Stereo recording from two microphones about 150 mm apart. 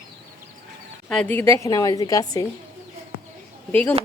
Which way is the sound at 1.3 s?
15° left (ahead or behind).